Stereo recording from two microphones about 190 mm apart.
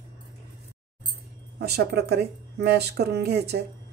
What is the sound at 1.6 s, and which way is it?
Speech, 55° right (ahead or behind).